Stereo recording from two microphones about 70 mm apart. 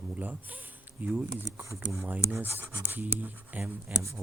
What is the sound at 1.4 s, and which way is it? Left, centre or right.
Speech, right.